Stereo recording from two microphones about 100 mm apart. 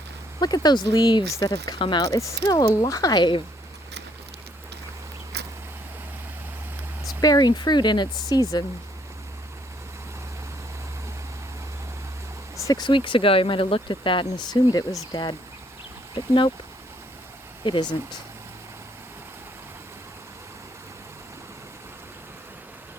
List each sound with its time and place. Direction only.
0.3 s speech: 40° left (ahead or behind)
2.0 s speech: 30° left (ahead or behind); by 3.4 s 50° left (ahead or behind)
7.2 s speech: 40° left (ahead or behind)
12.6 s speech: 45° left (ahead or behind)
17.6 s speech: 50° left (ahead or behind)